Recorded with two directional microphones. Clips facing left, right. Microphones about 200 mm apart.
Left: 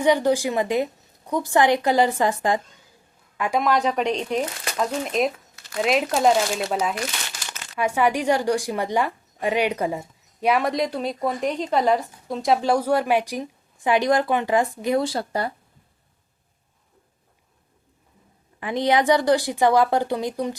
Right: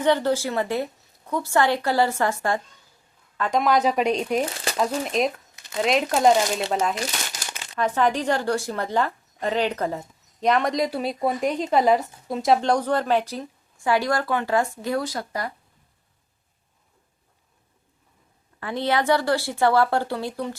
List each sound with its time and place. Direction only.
0.0 s a woman's voice: 15° left (ahead or behind)
3.6 s speech: centre (ahead or behind)
7.3 s crumpling: 40° right (ahead or behind)
7.8 s a woman's voice: 10° left (ahead or behind)
15.0 s speech: 30° left (ahead or behind)
18.6 s a woman's voice: 15° left (ahead or behind)